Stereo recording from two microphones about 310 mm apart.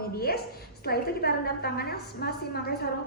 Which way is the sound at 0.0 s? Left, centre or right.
Left.